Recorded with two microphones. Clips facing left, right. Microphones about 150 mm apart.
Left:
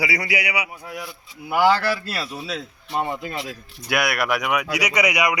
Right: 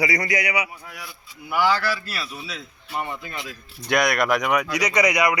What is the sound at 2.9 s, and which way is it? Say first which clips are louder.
Speech: left 4 dB; 25° left (ahead or behind).